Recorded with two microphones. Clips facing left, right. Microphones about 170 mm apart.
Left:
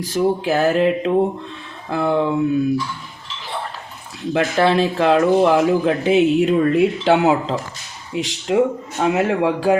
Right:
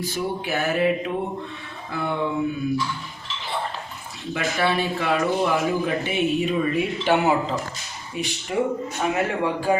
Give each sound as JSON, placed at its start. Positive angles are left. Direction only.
{"t": 0.0, "sound": "speech", "side_deg": 90}
{"t": 4.4, "sound": "speech", "side_deg": 90}